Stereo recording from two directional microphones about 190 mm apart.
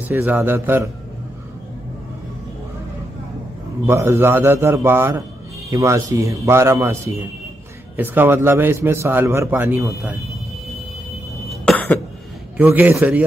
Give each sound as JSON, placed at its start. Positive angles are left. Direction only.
{"t": 0.1, "sound": "a man's voice", "side_deg": -10}
{"t": 3.8, "sound": "a man's voice", "side_deg": -15}
{"t": 11.6, "sound": "throat clearing", "side_deg": 10}
{"t": 12.5, "sound": "a man's voice", "side_deg": -10}